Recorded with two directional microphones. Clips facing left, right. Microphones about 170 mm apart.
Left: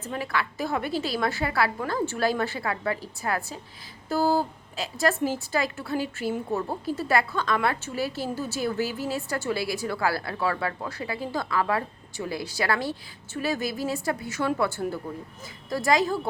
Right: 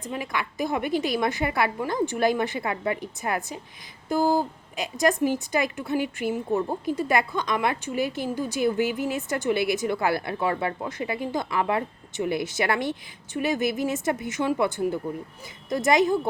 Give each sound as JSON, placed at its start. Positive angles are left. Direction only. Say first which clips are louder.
{"t": 0.0, "sound": "a woman's voice", "louder": "left 1 dB", "side_deg": -15}